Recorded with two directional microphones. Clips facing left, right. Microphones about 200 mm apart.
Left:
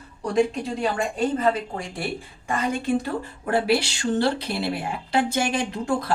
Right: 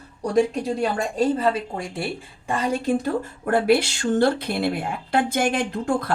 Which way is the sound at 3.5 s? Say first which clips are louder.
Right 3 dB; 50° right (ahead or behind).